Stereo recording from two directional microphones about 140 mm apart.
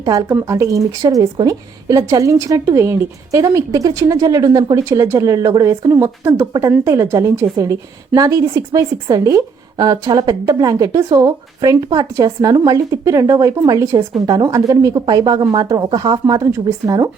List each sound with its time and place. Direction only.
0.0 s a woman's voice: 25° right (ahead or behind)